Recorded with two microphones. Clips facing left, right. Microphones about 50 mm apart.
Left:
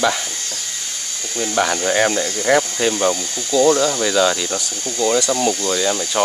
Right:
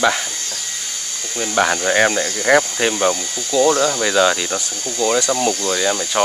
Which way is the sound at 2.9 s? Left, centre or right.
Centre.